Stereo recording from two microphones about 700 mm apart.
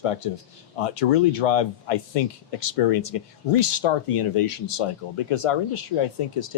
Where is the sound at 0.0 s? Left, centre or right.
Left.